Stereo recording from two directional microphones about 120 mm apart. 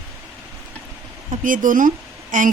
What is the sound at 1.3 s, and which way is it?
Speech, 90° right.